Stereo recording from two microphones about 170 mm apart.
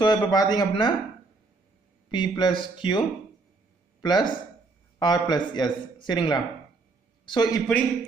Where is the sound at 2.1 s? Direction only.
25° left (ahead or behind).